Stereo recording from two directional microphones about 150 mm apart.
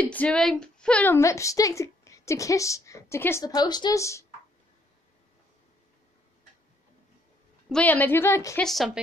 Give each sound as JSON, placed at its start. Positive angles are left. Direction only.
{"t": 0.0, "sound": "a woman's voice", "side_deg": 10}
{"t": 7.7, "sound": "a woman's voice", "side_deg": 10}
{"t": 8.5, "sound": "speech", "side_deg": 0}